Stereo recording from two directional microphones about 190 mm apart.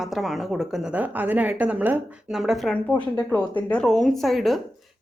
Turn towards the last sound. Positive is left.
turn(degrees=0)  # may be behind; listen again after turning